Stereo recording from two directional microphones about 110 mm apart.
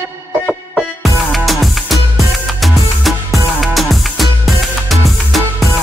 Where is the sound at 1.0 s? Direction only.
Centre (ahead or behind).